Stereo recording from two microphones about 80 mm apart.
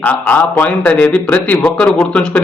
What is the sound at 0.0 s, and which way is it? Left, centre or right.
Speech, left.